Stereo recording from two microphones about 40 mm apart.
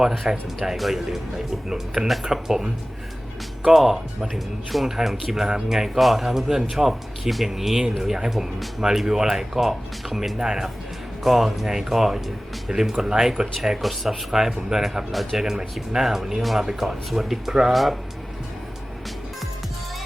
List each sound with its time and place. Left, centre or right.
0.3 s speech: centre
3.7 s speech: centre
11.2 s speech: centre